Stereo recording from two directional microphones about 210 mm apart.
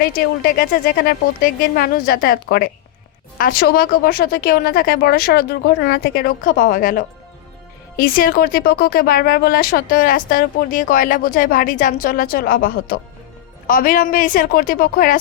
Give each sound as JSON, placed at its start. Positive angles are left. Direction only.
{"t": 0.0, "sound": "a woman's voice", "side_deg": 45}